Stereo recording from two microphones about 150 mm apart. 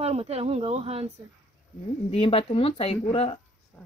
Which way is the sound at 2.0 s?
40° left (ahead or behind).